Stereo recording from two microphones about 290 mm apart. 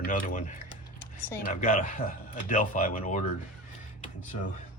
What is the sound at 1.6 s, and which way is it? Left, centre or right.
Speech, left.